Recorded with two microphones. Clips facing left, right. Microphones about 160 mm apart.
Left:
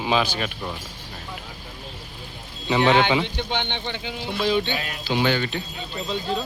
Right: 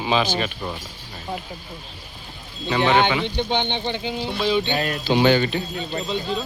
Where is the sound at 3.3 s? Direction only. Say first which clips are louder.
Right 4 dB; 15° right (ahead or behind).